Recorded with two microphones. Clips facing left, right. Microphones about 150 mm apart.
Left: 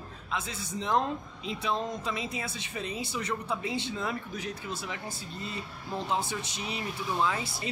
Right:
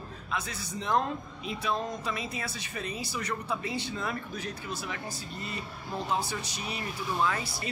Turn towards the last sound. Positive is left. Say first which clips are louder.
# even
turn(degrees=20)  # may be behind; listen again after turning